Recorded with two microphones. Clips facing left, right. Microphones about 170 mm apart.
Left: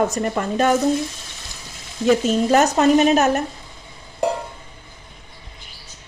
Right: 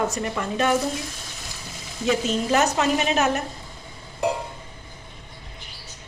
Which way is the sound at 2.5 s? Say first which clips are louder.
Left 6 dB; 45° left (ahead or behind).